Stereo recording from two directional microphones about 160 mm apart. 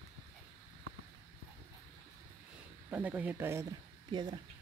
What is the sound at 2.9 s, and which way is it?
Speech, 10° right (ahead or behind).